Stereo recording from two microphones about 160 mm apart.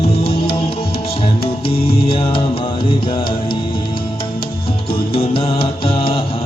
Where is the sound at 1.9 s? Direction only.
35° left (ahead or behind).